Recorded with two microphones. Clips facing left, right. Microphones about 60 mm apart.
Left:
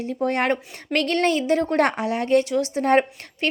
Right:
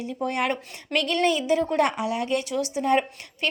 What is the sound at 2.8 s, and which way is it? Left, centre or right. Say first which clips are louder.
Speech: left 4 dB; left.